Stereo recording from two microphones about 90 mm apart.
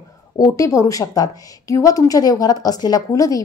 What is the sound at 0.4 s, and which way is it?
Speech, 35° left (ahead or behind).